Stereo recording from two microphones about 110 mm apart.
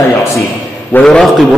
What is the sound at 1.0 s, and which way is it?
Speech, 5° left (ahead or behind).